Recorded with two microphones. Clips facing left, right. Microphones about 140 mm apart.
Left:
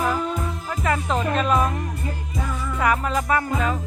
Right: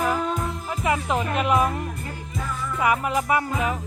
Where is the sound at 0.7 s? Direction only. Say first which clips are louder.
Even; 15° right (ahead or behind).